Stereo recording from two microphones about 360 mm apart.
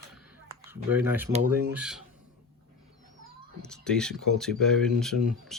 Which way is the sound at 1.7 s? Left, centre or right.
Centre.